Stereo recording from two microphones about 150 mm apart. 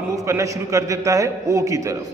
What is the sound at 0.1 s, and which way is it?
A man's voice, 20° right (ahead or behind).